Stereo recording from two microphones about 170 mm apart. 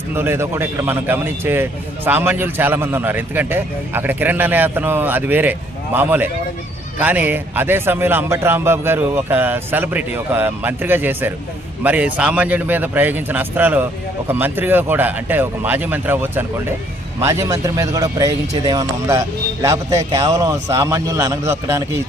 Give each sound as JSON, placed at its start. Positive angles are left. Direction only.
{"t": 0.1, "sound": "a man's voice", "side_deg": -15}